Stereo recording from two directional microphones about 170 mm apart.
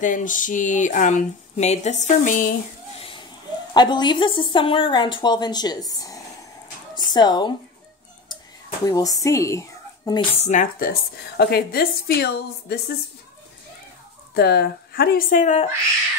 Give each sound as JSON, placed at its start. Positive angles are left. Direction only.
{"t": 0.0, "sound": "speech", "side_deg": 50}
{"t": 3.0, "sound": "a sound", "side_deg": 30}
{"t": 3.7, "sound": "a woman's voice", "side_deg": 25}
{"t": 8.8, "sound": "speech", "side_deg": 20}
{"t": 10.4, "sound": "a woman's voice", "side_deg": 45}
{"t": 14.3, "sound": "speech", "side_deg": 70}